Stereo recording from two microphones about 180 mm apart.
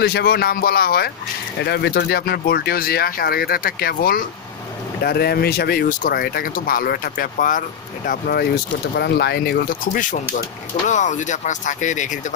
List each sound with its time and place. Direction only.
0.0 s speech: 60° left (ahead or behind)
1.6 s speech: 70° left (ahead or behind); by 7.6 s 50° left (ahead or behind)
8.1 s speech: 60° left (ahead or behind)